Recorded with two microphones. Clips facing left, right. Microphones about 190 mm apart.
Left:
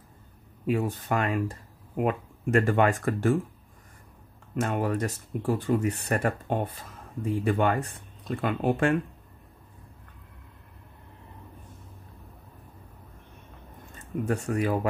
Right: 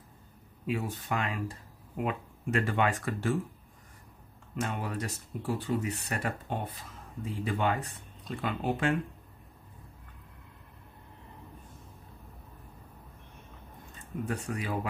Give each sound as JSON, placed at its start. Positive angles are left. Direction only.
{"t": 0.7, "sound": "speech", "side_deg": 45}
{"t": 4.6, "sound": "speech", "side_deg": 50}
{"t": 14.2, "sound": "speech", "side_deg": 50}